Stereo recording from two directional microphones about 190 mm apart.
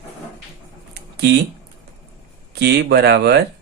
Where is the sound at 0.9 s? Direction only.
60° right (ahead or behind).